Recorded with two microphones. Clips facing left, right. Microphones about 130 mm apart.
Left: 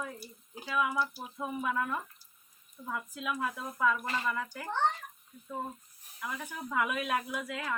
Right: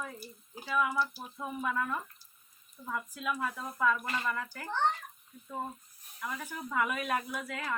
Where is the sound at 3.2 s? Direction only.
15° left (ahead or behind).